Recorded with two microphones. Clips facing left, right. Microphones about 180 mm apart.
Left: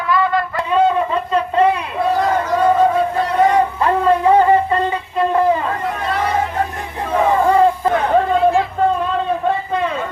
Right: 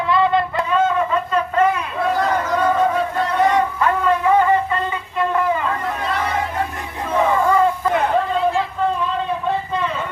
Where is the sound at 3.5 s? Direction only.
30° left (ahead or behind).